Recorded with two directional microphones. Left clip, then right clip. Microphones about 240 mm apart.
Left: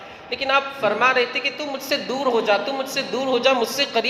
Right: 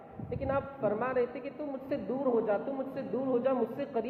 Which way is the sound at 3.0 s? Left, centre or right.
Left.